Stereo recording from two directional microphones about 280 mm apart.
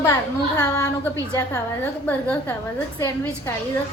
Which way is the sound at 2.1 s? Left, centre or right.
Centre.